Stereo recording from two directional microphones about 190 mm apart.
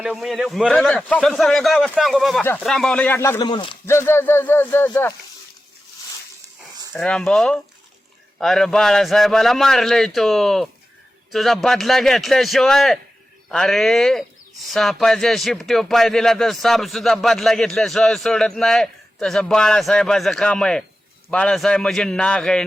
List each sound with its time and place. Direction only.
0.0 s speech: 5° right (ahead or behind); by 3.5 s 15° left (ahead or behind)
3.5 s speech: 25° left (ahead or behind)
3.8 s speech: 15° left (ahead or behind)
6.9 s speech: 5° left (ahead or behind)